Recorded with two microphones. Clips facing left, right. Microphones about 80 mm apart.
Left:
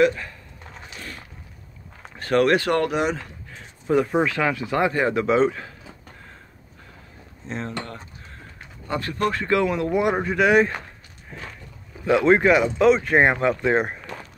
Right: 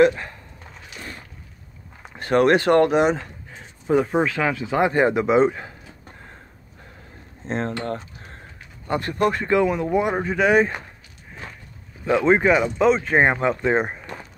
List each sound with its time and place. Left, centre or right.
0.0 s speech: right
0.9 s a sound: right
2.1 s speech: right
3.5 s speech: centre
4.8 s speech: right
7.4 s speech: right
9.2 s speech: centre
12.1 s speech: centre
12.4 s speech: centre